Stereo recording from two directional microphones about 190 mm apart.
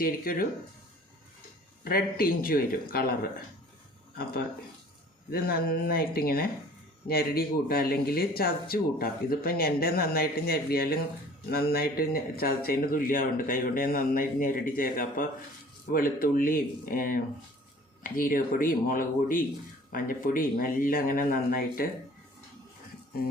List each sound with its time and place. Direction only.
0.0 s speech: 50° left (ahead or behind)
1.8 s speech: 50° left (ahead or behind)
5.3 s speech: 50° left (ahead or behind)